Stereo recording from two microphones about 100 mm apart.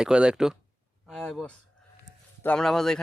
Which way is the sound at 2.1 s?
40° right (ahead or behind).